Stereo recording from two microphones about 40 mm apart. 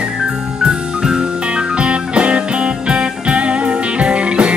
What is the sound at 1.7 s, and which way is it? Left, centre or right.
Music, right.